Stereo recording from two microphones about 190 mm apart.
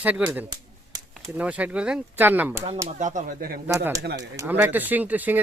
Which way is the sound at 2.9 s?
40° right (ahead or behind).